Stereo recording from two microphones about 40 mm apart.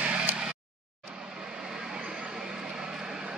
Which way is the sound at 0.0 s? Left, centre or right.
Right.